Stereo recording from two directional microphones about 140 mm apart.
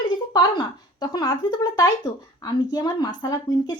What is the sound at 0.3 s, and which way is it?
A woman's voice, 30° left (ahead or behind).